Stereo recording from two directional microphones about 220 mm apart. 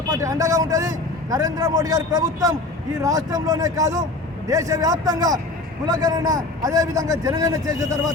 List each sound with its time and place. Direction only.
0.1 s a man's voice: 15° right (ahead or behind)